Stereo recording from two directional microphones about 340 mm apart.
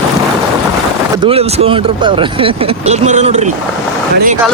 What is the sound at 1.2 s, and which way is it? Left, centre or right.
Speech, centre.